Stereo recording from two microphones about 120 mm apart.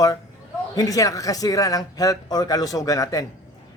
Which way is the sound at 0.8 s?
30° left (ahead or behind).